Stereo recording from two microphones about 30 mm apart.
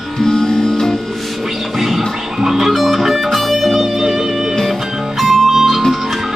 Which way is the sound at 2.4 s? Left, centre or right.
Centre.